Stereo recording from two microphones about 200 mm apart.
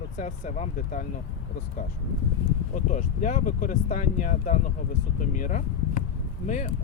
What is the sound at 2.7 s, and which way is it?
Speech, 40° left (ahead or behind).